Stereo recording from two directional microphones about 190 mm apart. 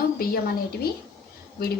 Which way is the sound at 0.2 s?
50° left (ahead or behind).